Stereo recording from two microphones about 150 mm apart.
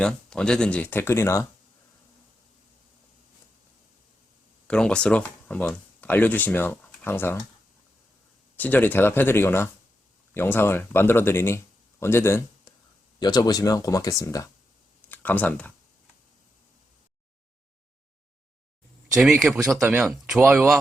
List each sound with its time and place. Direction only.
0.0 s speech: 5° left (ahead or behind)
4.7 s speech: 5° left (ahead or behind)
8.5 s speech: 10° left (ahead or behind)
13.1 s speech: 25° left (ahead or behind)
15.1 s speech: 10° left (ahead or behind)
19.1 s speech: centre (ahead or behind)